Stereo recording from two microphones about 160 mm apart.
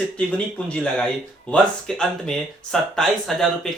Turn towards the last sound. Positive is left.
turn(degrees=0)  # may be behind; listen again after turning